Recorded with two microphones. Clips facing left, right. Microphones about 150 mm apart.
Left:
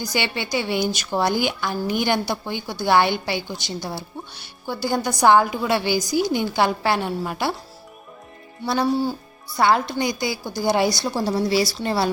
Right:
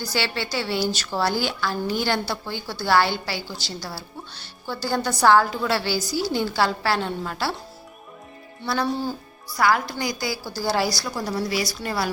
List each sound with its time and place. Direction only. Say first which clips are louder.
0.0 s a woman's voice: left 1 dB; 15° left (ahead or behind)
8.6 s a woman's voice: left 4 dB; 20° left (ahead or behind)